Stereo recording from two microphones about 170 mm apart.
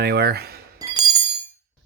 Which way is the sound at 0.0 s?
70° right (ahead or behind).